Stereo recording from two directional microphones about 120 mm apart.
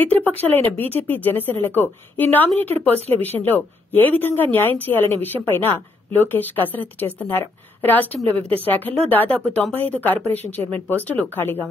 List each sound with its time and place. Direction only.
0.0 s speech: 15° left (ahead or behind)